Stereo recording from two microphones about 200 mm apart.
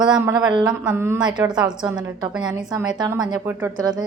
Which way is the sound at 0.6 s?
5° right (ahead or behind).